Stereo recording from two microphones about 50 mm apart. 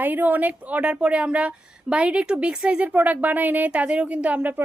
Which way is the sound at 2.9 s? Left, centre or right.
Right.